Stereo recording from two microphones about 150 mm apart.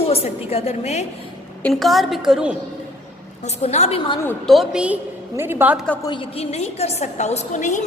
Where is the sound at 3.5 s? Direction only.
45° left (ahead or behind).